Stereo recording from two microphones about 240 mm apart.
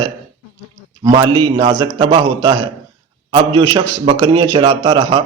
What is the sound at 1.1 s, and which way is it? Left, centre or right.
Speech, centre.